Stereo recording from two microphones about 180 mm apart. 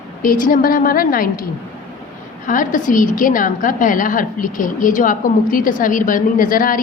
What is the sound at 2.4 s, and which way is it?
A woman's voice, 50° left (ahead or behind).